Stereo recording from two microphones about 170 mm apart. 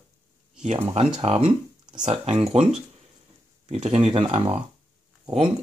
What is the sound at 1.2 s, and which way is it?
Speech, 35° right (ahead or behind).